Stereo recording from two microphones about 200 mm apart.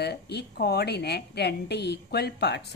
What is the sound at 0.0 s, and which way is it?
A woman's voice, 55° left (ahead or behind).